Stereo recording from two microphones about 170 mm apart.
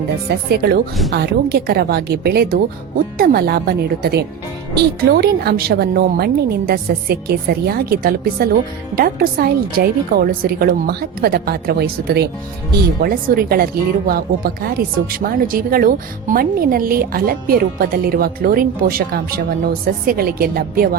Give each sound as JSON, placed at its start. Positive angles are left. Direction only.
{"t": 0.3, "sound": "a woman's voice", "side_deg": -65}
{"t": 13.0, "sound": "speech", "side_deg": -60}